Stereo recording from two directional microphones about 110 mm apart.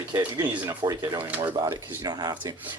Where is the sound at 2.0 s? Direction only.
40° right (ahead or behind).